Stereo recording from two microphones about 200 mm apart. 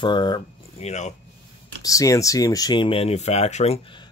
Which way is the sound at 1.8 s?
15° left (ahead or behind).